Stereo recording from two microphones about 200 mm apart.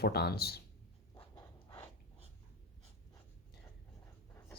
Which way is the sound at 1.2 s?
25° left (ahead or behind).